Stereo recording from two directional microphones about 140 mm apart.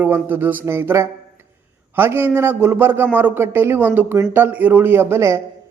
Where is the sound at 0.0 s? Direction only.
15° right (ahead or behind).